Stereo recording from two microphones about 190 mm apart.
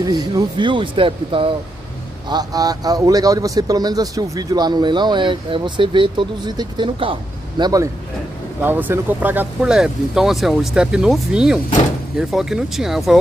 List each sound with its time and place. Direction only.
0.0 s speech: 20° right (ahead or behind)
8.5 s speech: 10° right (ahead or behind)